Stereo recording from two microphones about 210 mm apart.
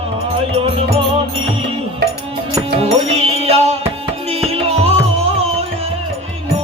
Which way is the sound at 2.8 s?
30° right (ahead or behind).